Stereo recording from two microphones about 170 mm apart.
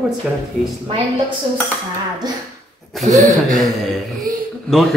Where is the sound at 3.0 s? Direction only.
40° right (ahead or behind).